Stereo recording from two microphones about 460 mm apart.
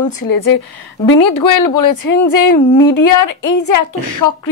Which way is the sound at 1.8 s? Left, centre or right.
Left.